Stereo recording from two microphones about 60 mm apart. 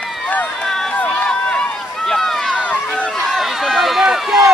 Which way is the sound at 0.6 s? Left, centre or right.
Centre.